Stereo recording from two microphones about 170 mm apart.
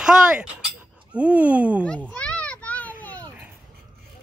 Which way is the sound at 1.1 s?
5° right (ahead or behind).